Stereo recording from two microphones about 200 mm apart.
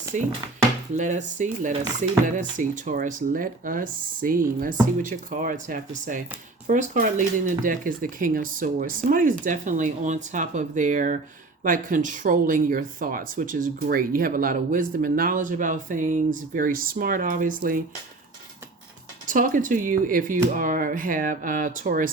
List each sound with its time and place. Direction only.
0.9 s speech: 40° right (ahead or behind)
19.3 s speech: 45° right (ahead or behind)